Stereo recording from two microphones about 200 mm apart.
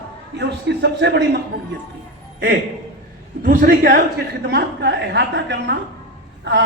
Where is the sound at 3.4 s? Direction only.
45° right (ahead or behind); by 5.8 s 60° right (ahead or behind).